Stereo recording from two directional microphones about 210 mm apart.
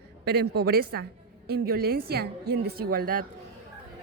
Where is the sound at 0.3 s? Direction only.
50° right (ahead or behind).